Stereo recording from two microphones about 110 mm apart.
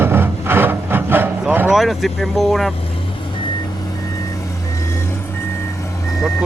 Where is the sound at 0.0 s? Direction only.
20° right (ahead or behind).